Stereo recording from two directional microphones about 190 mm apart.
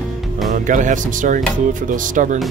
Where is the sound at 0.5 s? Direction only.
40° right (ahead or behind).